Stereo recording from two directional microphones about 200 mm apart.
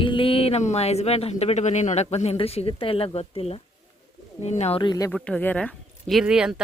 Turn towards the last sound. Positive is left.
turn(degrees=-5)  # may be behind; listen again after turning